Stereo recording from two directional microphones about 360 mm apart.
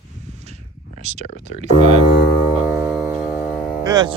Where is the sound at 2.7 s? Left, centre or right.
Centre.